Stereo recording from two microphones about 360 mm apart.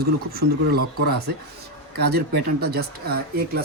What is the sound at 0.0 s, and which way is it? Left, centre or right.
Speech, right.